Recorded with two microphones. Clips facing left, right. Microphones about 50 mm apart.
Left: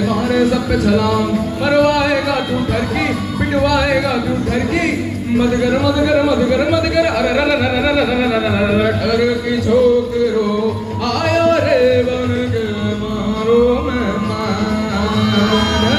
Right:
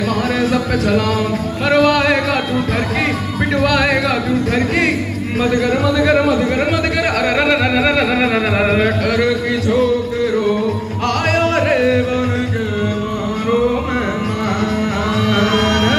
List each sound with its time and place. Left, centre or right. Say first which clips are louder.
0.3 s speech: left 2 dB; right
3.5 s speech: left 1 dB; right
11.3 s music: left 4 dB; right
15.3 s music: right 1 dB; right